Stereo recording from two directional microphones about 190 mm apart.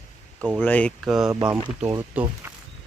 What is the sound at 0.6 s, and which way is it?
Speech, 10° left (ahead or behind).